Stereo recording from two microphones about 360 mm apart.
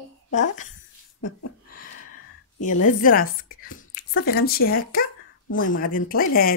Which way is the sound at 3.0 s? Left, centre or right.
Left.